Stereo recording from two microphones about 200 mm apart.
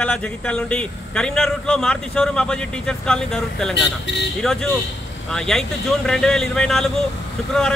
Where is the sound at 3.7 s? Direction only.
60° left (ahead or behind).